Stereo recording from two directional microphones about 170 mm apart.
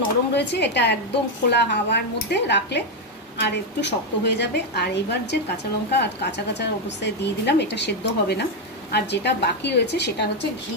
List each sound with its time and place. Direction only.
0.4 s a woman's voice: 90° left